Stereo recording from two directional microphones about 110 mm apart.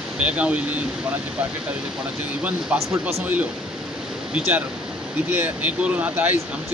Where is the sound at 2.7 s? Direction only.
10° right (ahead or behind).